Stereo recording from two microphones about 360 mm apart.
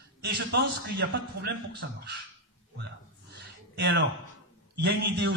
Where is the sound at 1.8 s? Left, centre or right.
Right.